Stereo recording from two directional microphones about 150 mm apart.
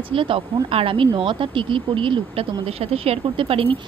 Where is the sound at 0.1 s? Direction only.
35° right (ahead or behind).